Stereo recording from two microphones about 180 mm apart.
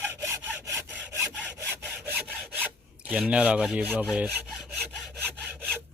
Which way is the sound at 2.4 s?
5° right (ahead or behind).